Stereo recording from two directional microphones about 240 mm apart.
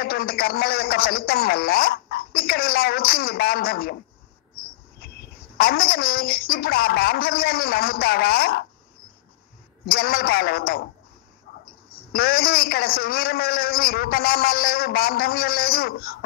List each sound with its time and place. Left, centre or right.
0.0 s a man's voice: left
5.6 s a man's voice: left
9.8 s a man's voice: left
12.1 s a man's voice: left